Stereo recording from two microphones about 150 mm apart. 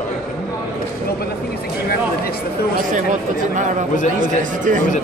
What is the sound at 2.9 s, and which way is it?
Speech, 55° right (ahead or behind).